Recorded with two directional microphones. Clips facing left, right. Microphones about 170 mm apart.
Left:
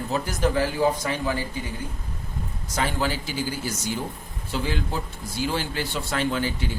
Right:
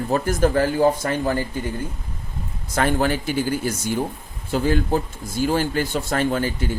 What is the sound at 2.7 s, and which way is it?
Speech, 55° right (ahead or behind).